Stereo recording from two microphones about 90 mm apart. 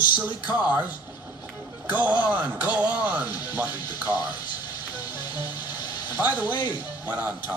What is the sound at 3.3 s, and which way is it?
Speech, 55° left (ahead or behind).